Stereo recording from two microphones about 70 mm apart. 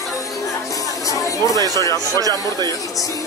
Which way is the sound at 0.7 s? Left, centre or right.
Left.